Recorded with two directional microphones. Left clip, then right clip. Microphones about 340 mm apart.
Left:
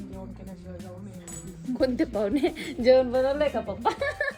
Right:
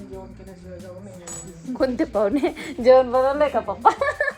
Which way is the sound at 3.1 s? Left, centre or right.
Right.